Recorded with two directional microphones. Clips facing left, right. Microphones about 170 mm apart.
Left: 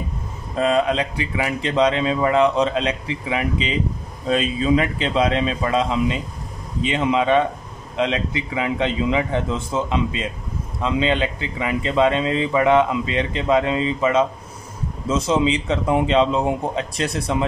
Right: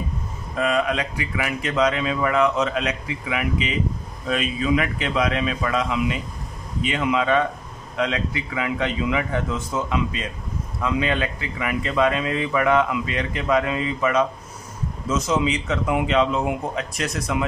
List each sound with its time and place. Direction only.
0.6 s speech: 30° left (ahead or behind)